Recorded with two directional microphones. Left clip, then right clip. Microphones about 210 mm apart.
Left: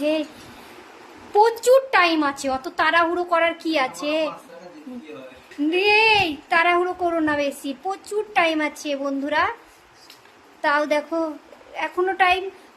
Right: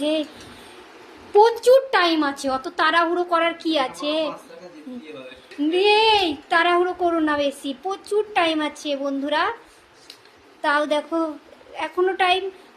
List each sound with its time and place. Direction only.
0.0 s a woman's voice: 10° left (ahead or behind)
1.4 s a woman's voice: 10° left (ahead or behind)
5.7 s speech: 5° left (ahead or behind)
10.6 s speech: 5° left (ahead or behind)